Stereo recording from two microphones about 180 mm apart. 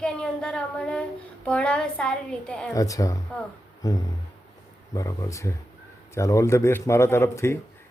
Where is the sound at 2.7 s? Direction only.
20° left (ahead or behind).